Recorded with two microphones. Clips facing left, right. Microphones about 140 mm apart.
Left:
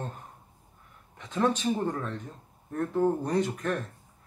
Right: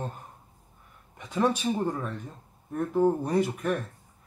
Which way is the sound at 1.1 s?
10° right (ahead or behind).